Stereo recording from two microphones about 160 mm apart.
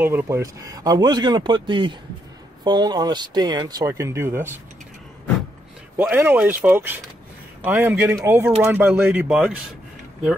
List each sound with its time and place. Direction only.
0.0 s speech: 15° right (ahead or behind)
5.9 s speech: 10° right (ahead or behind)